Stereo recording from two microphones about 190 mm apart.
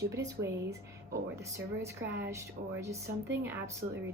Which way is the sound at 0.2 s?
15° right (ahead or behind).